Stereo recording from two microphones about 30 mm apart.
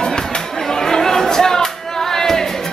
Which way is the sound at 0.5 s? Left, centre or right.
Centre.